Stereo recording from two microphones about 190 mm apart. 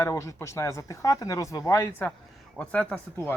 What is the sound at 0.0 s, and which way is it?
Speech, 15° left (ahead or behind).